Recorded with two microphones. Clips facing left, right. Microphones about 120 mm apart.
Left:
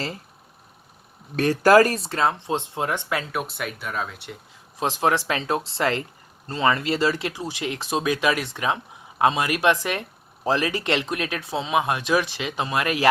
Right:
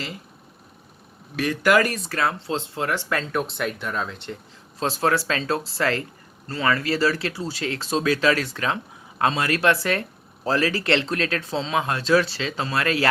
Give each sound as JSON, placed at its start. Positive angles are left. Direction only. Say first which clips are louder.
{"t": 1.4, "sound": "speech", "louder": "left 4 dB", "side_deg": 35}
{"t": 4.8, "sound": "speech", "louder": "even", "side_deg": 15}